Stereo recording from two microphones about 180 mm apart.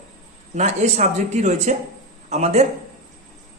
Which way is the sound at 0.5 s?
40° right (ahead or behind).